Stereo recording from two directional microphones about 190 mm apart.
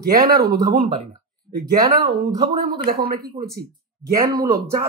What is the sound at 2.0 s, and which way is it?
A man's voice, 45° right (ahead or behind).